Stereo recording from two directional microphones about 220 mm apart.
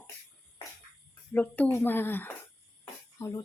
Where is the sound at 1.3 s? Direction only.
10° left (ahead or behind).